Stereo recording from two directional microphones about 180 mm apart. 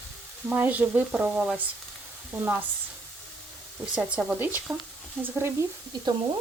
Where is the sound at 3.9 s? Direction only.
5° right (ahead or behind).